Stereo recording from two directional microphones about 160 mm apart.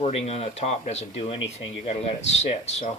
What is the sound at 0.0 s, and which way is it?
A man's voice, 40° left (ahead or behind).